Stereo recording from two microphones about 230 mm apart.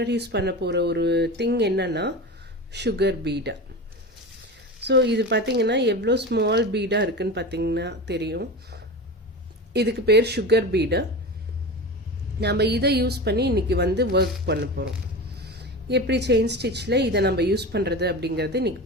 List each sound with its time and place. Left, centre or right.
0.0 s speech: right
4.9 s speech: right
12.4 s speech: right